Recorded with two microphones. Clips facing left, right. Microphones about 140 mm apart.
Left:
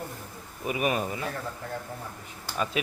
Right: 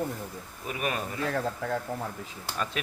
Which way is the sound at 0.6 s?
10° left (ahead or behind).